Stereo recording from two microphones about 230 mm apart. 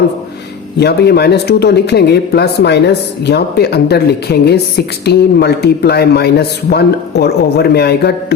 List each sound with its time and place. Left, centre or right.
0.8 s speech: left